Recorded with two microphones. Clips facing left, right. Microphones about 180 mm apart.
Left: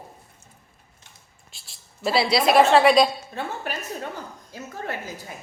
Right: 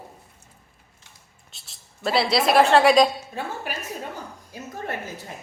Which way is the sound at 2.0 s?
Centre (ahead or behind).